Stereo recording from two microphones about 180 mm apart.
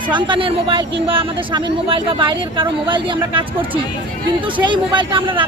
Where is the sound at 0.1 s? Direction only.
25° right (ahead or behind).